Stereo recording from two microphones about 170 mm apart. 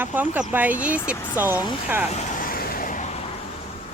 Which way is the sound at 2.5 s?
60° left (ahead or behind).